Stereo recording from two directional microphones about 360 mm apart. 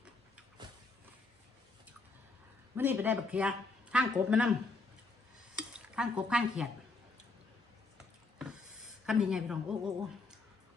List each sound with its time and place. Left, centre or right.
2.7 s speech: centre
5.5 s stir: centre
9.0 s speech: centre